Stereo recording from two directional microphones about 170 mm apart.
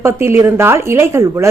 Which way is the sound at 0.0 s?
15° right (ahead or behind).